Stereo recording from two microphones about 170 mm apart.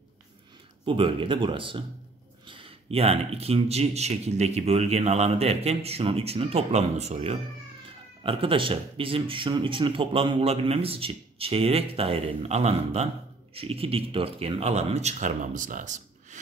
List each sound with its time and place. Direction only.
0.8 s speech: 30° right (ahead or behind); by 16.3 s 45° right (ahead or behind)